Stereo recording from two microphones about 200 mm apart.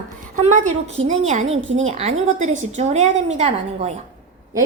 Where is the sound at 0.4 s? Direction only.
35° right (ahead or behind).